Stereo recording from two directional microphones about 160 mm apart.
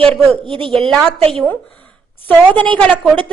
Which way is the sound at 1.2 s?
40° right (ahead or behind).